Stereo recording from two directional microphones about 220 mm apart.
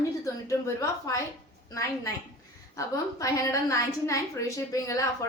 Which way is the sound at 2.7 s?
15° left (ahead or behind).